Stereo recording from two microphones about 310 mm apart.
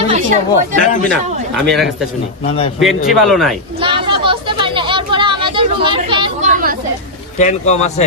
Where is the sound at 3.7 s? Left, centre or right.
Centre.